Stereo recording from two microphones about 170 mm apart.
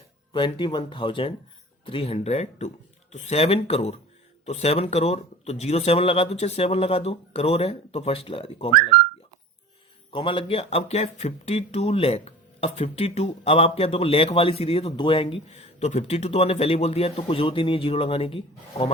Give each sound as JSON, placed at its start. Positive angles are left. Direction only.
{"t": 0.3, "sound": "speech", "side_deg": 30}
{"t": 10.1, "sound": "speech", "side_deg": 30}